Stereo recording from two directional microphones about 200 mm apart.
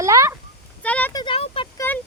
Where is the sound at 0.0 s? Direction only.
15° right (ahead or behind).